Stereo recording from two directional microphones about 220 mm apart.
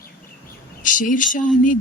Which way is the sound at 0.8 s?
35° left (ahead or behind).